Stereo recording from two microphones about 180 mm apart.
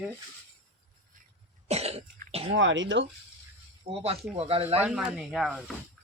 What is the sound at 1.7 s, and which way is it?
Speech, 35° right (ahead or behind).